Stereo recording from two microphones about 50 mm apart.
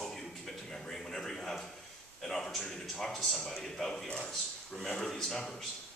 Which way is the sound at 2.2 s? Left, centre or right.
Centre.